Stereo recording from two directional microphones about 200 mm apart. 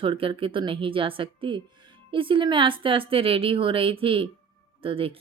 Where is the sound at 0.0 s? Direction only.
25° right (ahead or behind).